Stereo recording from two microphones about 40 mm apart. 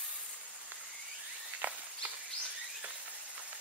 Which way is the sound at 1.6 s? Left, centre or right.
Right.